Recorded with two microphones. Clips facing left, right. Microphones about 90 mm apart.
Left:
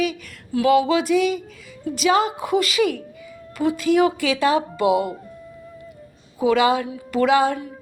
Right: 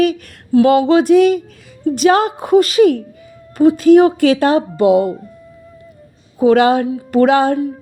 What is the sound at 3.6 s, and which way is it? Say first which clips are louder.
Speech: right 10 dB; 40° right (ahead or behind).